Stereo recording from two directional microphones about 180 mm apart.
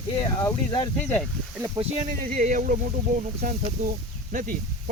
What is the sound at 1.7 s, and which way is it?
Speech, 40° right (ahead or behind).